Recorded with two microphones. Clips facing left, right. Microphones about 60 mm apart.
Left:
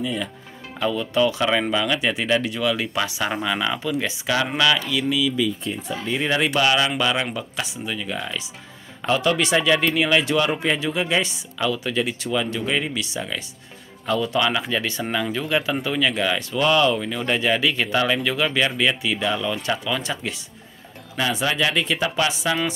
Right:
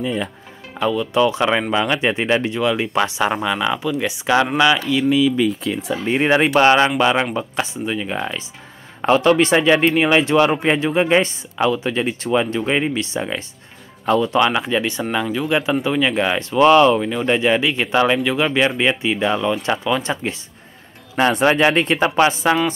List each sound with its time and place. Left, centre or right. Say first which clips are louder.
0.0 s speech: right 4 dB; right
0.7 s speech: right 4 dB; centre
1.3 s speech: right 3 dB; right
3.4 s speech: right 4 dB; centre; by 5.3 s right
5.7 s speech: right 6 dB; right
6.0 s speech: right 6 dB; right
7.0 s speech: right 6 dB; right
11.6 s speech: right 4 dB; right
21.2 s speech: right 7 dB; right